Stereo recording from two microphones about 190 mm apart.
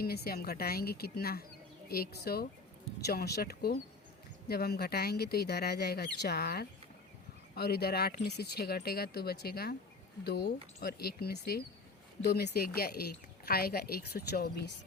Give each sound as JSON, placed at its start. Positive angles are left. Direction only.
{"t": 0.0, "sound": "speech", "side_deg": 55}